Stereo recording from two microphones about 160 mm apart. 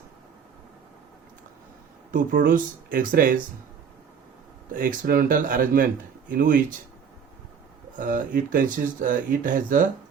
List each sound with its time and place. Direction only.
2.1 s speech: 60° right (ahead or behind)
4.7 s speech: 55° right (ahead or behind)
7.9 s speech: 55° right (ahead or behind)